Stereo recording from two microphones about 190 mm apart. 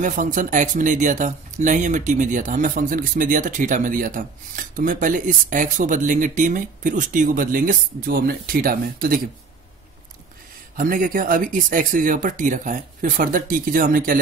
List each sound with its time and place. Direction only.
0.0 s speech: 45° right (ahead or behind)
10.8 s speech: 45° right (ahead or behind)